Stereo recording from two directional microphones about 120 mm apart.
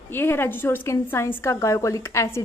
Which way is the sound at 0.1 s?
20° left (ahead or behind).